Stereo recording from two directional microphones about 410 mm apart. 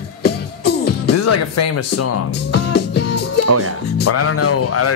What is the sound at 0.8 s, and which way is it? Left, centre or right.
Music, left.